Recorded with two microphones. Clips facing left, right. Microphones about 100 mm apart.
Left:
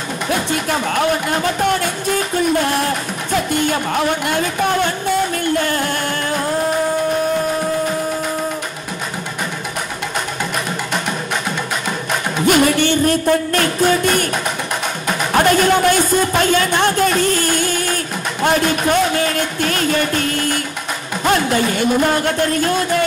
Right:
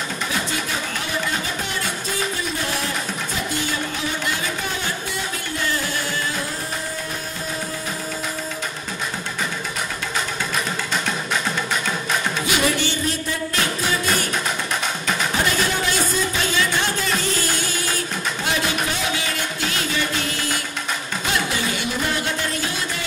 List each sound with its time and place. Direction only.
0.3 s music: 55° left (ahead or behind)
12.4 s music: 50° left (ahead or behind)
15.3 s a sound: 55° left (ahead or behind)
21.2 s music: 50° left (ahead or behind)